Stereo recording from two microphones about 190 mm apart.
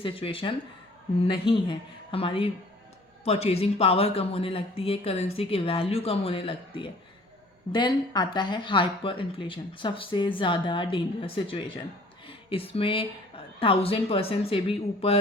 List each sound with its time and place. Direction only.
0.0 s speech: 30° left (ahead or behind)